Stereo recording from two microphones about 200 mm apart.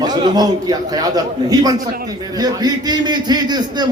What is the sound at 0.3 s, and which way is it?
A man's voice, 20° right (ahead or behind).